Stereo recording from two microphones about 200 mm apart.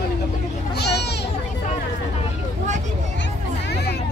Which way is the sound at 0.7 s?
55° left (ahead or behind).